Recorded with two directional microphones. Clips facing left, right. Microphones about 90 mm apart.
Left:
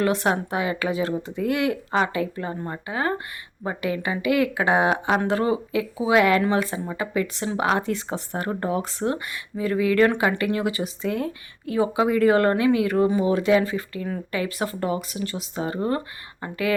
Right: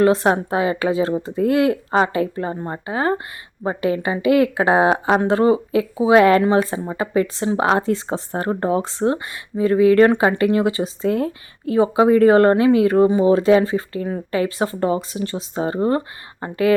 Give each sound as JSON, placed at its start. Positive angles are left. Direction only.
{"t": 0.0, "sound": "speech", "side_deg": -35}